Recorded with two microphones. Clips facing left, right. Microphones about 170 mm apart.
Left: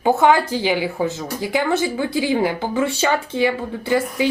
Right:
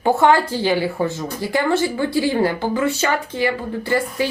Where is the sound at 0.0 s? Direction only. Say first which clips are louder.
Even; 15° left (ahead or behind).